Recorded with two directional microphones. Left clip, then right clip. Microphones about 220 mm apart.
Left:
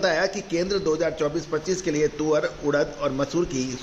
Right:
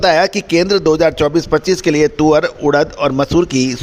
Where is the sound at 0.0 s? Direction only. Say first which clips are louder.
Right 11 dB; 45° right (ahead or behind).